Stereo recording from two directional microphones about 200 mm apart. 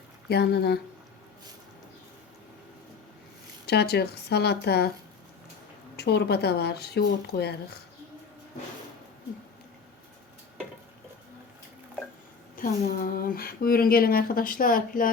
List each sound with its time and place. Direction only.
0.3 s speech: 55° left (ahead or behind)
3.7 s speech: 55° left (ahead or behind)
6.0 s speech: 55° left (ahead or behind)
12.6 s a sound: 45° left (ahead or behind)
12.9 s speech: 45° left (ahead or behind)